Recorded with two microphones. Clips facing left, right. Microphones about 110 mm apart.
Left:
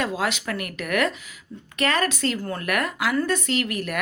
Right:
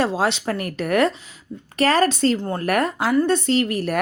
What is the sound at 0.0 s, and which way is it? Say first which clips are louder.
A woman's voice: right 5 dB; 30° right (ahead or behind).